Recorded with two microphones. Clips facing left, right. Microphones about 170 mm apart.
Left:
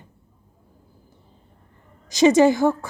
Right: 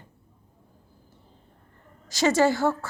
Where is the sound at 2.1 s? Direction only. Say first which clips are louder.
Left 6 dB; 20° left (ahead or behind).